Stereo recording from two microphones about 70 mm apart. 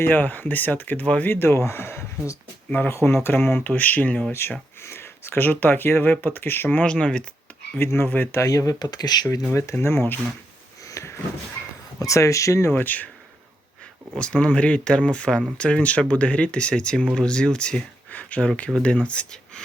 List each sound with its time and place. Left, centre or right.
0.0 s speech: left
1.3 s speech: left
2.6 s speech: left
2.9 s speech: left
4.3 s speech: left; by 7.3 s centre
7.8 s speech: left
8.4 s speech: left
9.8 s speech: left
10.8 s sniff: left
11.9 s speech: left
12.7 s speech: left
14.2 s speech: centre